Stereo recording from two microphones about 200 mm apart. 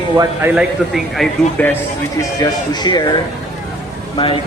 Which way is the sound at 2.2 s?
20° left (ahead or behind).